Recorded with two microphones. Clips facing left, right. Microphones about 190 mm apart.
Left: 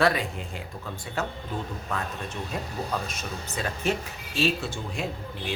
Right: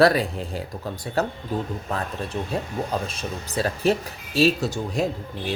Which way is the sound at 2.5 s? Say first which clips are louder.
Right 3 dB; 30° right (ahead or behind).